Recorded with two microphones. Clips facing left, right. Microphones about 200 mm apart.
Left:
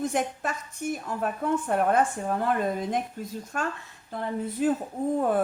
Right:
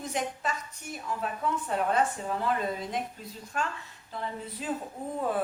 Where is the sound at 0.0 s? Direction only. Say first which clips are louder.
Left 5 dB; 50° left (ahead or behind).